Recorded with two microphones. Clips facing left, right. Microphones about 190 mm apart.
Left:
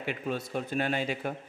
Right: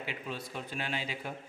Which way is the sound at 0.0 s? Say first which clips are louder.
Left 7 dB; 55° left (ahead or behind).